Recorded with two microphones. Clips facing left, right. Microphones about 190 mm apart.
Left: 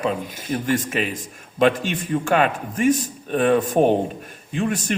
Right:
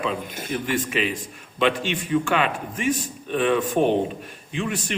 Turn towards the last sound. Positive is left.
turn(degrees=45)  # may be behind; listen again after turning